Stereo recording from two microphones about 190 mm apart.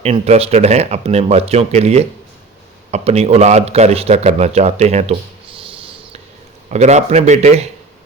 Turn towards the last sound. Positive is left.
turn(degrees=-35)  # may be behind; listen again after turning